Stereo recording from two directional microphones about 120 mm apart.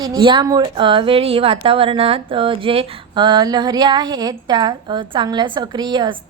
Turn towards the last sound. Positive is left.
turn(degrees=-40)  # may be behind; listen again after turning